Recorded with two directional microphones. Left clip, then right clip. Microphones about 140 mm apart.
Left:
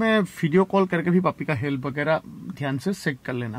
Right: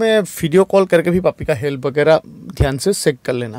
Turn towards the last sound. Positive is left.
turn(degrees=-45)  # may be behind; listen again after turning